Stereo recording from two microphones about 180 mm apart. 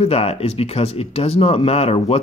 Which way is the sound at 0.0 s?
35° left (ahead or behind).